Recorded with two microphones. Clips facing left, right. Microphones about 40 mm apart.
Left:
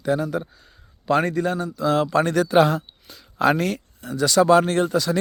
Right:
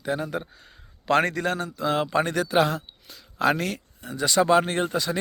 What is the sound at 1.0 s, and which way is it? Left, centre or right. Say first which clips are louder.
Speech: left 2 dB; right.